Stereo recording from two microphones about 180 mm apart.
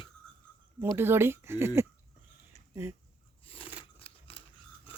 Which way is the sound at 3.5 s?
30° left (ahead or behind).